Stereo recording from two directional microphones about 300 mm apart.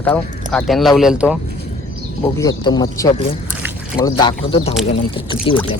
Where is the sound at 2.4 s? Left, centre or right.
Centre.